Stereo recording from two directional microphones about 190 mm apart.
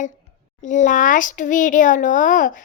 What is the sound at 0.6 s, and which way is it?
Speech, 40° left (ahead or behind).